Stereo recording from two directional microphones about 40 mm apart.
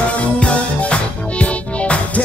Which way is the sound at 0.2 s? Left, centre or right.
Left.